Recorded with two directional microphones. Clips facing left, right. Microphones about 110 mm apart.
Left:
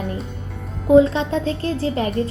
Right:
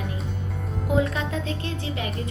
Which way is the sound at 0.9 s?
25° left (ahead or behind).